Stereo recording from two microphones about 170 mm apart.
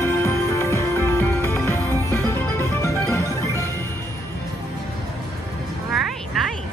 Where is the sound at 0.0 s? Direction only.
15° left (ahead or behind).